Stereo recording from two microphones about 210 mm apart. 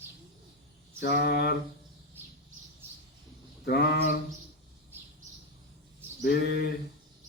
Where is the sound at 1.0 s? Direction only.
50° left (ahead or behind).